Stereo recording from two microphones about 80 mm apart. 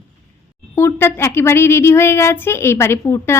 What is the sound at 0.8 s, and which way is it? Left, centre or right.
Speech, left.